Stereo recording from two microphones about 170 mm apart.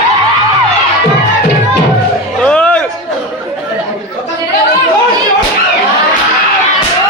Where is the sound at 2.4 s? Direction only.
5° left (ahead or behind).